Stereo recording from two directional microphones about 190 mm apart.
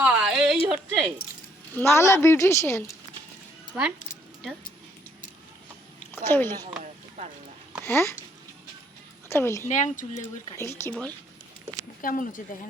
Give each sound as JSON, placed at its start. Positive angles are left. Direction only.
{"t": 0.0, "sound": "a sound", "side_deg": -5}
{"t": 0.7, "sound": "speech", "side_deg": 5}
{"t": 1.7, "sound": "a woman's voice", "side_deg": 15}
{"t": 3.7, "sound": "speech", "side_deg": -10}
{"t": 6.1, "sound": "a woman's voice", "side_deg": 10}
{"t": 7.9, "sound": "a woman's voice", "side_deg": 15}
{"t": 9.3, "sound": "a woman's voice", "side_deg": 15}
{"t": 9.6, "sound": "speech", "side_deg": 40}
{"t": 10.6, "sound": "a woman's voice", "side_deg": 15}
{"t": 12.0, "sound": "speech", "side_deg": 45}